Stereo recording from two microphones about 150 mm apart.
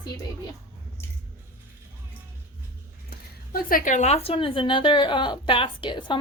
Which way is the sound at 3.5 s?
65° left (ahead or behind).